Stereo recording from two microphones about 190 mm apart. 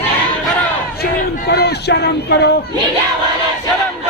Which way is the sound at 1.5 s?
60° left (ahead or behind).